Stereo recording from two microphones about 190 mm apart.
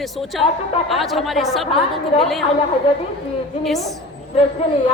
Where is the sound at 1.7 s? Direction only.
30° left (ahead or behind).